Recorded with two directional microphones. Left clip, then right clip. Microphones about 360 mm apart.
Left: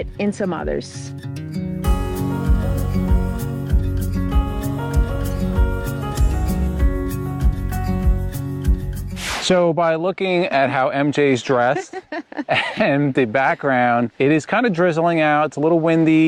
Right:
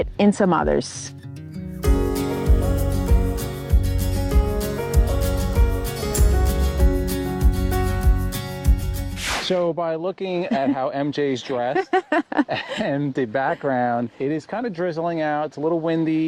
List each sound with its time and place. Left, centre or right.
0.0 s speech: centre
9.2 s music: centre
9.6 s speech: left
11.4 s speech: left
11.8 s speech: right
12.5 s speech: left
14.2 s speech: left